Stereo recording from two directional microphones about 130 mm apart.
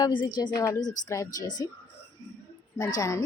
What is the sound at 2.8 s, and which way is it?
Speech, 30° left (ahead or behind).